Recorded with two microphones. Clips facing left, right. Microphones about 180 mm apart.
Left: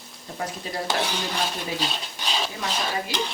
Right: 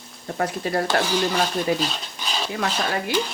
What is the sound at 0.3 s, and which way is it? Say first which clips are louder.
Speech: right 7 dB; 65° right (ahead or behind).